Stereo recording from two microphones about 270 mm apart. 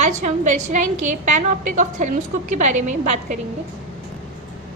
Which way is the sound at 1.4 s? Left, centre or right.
Right.